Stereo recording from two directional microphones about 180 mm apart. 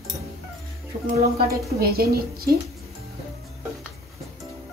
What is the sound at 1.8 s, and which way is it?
Speech, 55° right (ahead or behind).